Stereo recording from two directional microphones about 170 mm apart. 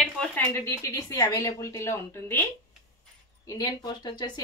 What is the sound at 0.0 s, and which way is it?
Speech, 10° left (ahead or behind).